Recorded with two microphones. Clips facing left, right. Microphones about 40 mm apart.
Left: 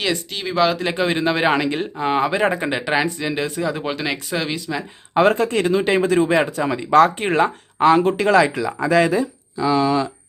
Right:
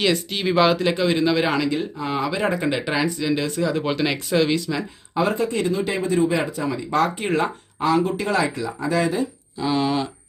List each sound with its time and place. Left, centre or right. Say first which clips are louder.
0.0 s speech: right 2 dB; centre
0.9 s speech: even; left
3.9 s speech: right 3 dB; centre
5.1 s speech: left 5 dB; left